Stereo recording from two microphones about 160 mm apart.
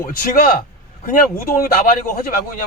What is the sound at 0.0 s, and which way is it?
Speech, 65° left (ahead or behind).